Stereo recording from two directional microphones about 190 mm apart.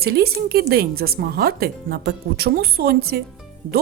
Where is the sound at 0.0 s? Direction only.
55° right (ahead or behind).